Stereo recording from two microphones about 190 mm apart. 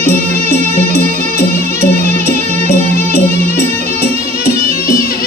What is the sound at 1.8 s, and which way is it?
Music, 50° left (ahead or behind).